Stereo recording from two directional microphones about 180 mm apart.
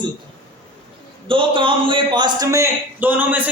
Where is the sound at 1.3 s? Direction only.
30° right (ahead or behind).